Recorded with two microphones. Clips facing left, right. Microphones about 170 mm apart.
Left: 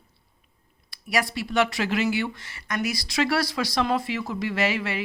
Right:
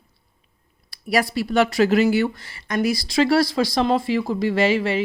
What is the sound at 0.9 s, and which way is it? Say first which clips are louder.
Speech: right 5 dB; 35° right (ahead or behind).